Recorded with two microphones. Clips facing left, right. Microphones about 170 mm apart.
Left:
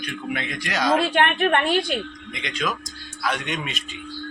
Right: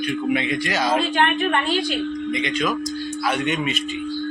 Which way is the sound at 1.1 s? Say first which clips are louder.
Even; 60° left (ahead or behind).